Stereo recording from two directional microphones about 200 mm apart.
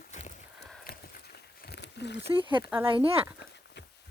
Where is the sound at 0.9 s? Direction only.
55° left (ahead or behind).